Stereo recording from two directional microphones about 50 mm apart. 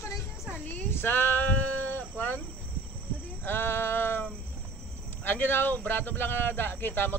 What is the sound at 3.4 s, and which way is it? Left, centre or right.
Speech, left.